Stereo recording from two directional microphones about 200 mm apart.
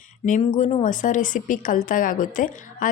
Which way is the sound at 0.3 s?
40° left (ahead or behind).